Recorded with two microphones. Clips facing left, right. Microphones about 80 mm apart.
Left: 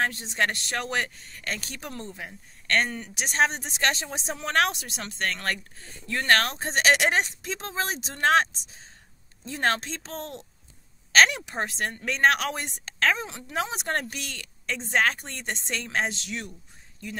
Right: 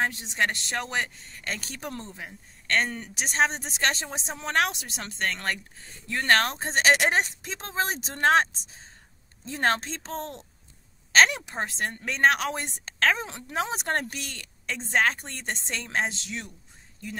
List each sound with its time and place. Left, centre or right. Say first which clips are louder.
0.0 s speech: even; centre
1.3 s speech: left 1 dB; right
2.9 s speech: even; right
9.5 s speech: right 1 dB; right